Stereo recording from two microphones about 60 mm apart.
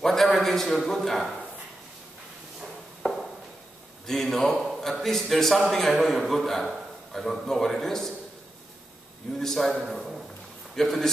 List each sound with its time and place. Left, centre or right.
0.0 s a man's voice: centre
2.6 s a sound: centre
4.1 s a man's voice: centre
9.4 s a man's voice: centre